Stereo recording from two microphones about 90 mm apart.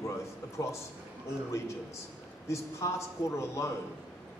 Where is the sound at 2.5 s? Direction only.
35° left (ahead or behind).